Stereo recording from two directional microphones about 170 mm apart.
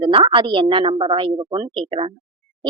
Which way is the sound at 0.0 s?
30° right (ahead or behind).